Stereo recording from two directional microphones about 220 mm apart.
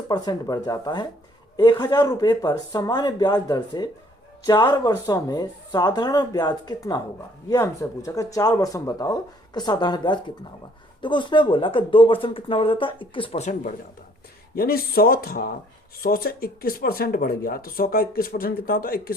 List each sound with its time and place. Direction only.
0.1 s speech: 20° left (ahead or behind); by 19.1 s 40° left (ahead or behind)